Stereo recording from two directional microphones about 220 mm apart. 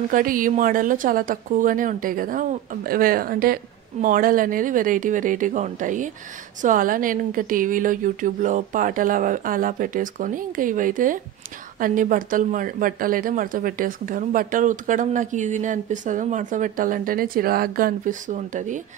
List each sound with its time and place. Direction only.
0.1 s speech: 40° right (ahead or behind)